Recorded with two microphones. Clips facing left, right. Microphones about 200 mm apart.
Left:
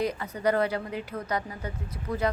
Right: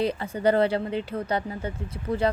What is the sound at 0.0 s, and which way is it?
Speech, 30° right (ahead or behind).